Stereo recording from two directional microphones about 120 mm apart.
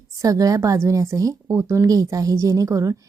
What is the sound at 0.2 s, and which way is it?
A woman's voice, 30° right (ahead or behind).